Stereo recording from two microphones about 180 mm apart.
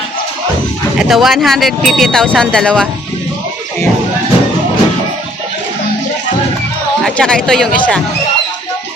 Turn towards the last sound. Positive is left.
turn(degrees=5)  # may be behind; listen again after turning